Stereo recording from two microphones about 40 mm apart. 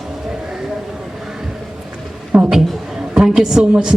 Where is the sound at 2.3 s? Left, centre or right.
Right.